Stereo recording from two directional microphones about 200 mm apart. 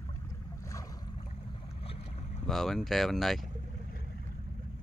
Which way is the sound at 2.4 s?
Centre (ahead or behind).